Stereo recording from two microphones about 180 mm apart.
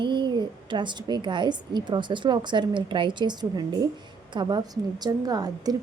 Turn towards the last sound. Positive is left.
turn(degrees=-20)  # may be behind; listen again after turning